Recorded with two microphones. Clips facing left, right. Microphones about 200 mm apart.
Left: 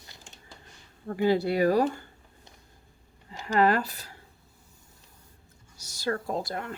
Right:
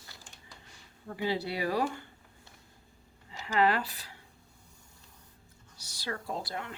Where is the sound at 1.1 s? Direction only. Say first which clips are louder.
Left 8 dB; 50° left (ahead or behind).